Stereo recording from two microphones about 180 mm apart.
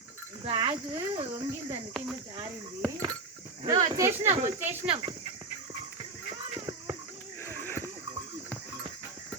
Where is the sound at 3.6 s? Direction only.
20° right (ahead or behind).